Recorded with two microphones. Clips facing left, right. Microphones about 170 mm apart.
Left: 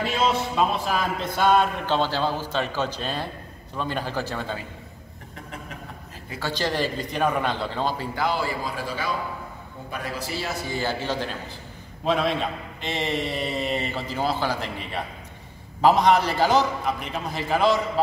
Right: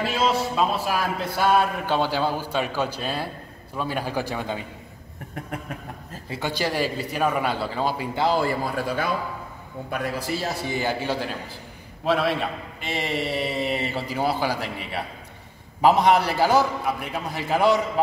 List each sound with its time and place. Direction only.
0.0 s speech: 5° right (ahead or behind)
6.4 s speech: 10° right (ahead or behind)
8.3 s speech: 50° right (ahead or behind)
10.7 s speech: 15° right (ahead or behind)